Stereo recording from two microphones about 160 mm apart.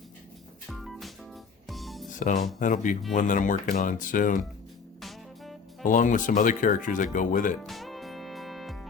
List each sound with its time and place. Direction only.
0.7 s music: centre (ahead or behind)
2.1 s speech: 55° left (ahead or behind)
4.9 s music: centre (ahead or behind)
5.8 s speech: 55° left (ahead or behind)
7.6 s music: centre (ahead or behind)